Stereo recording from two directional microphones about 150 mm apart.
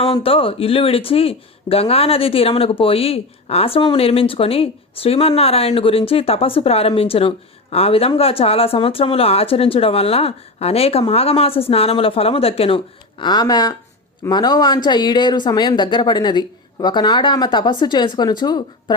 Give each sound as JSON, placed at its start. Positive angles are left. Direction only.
{"t": 0.0, "sound": "speech", "side_deg": 40}